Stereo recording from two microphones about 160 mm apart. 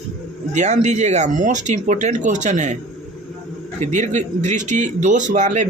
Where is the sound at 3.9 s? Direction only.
50° right (ahead or behind).